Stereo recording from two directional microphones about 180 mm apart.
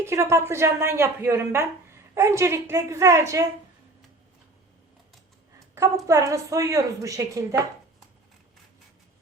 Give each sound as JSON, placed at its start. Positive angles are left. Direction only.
{"t": 0.0, "sound": "speech", "side_deg": -15}
{"t": 5.7, "sound": "speech", "side_deg": -20}